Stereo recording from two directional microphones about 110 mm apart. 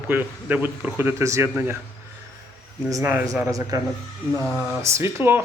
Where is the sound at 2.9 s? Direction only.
25° right (ahead or behind).